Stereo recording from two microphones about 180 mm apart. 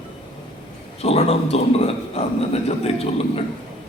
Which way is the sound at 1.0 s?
35° left (ahead or behind).